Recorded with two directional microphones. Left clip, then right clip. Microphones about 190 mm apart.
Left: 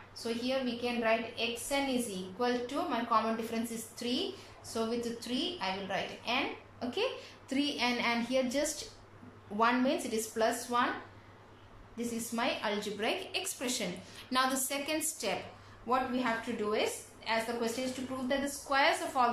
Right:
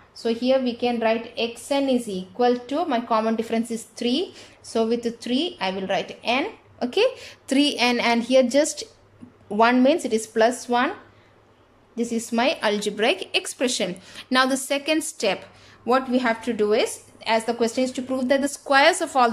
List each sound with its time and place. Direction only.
0.1 s a woman's voice: 50° right (ahead or behind)
11.9 s a woman's voice: 55° right (ahead or behind)